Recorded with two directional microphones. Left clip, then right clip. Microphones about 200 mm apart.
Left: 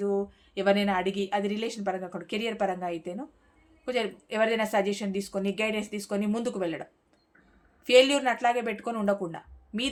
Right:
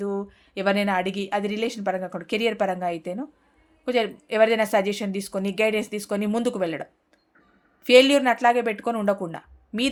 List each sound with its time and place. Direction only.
0.0 s speech: 40° right (ahead or behind)
7.9 s speech: 40° right (ahead or behind)